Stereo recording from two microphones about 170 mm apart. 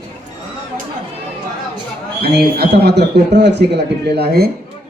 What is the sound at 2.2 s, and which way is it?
A man's voice, 70° right (ahead or behind).